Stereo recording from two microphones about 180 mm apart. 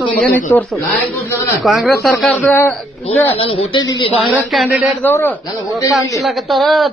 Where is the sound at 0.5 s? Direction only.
10° left (ahead or behind).